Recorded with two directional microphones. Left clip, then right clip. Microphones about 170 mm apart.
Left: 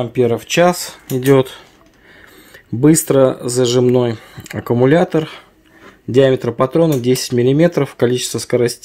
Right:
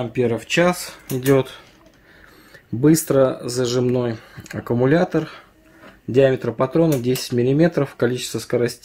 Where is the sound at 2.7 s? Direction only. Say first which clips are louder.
Left 4 dB; 40° left (ahead or behind).